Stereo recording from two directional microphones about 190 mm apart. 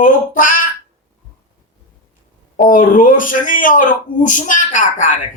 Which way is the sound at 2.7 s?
45° left (ahead or behind).